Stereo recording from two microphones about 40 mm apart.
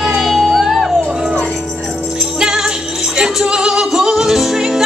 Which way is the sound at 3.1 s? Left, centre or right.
Centre.